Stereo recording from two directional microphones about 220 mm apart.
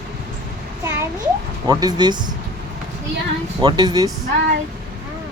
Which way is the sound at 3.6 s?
20° right (ahead or behind).